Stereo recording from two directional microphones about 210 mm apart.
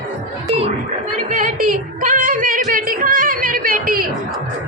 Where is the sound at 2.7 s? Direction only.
40° right (ahead or behind).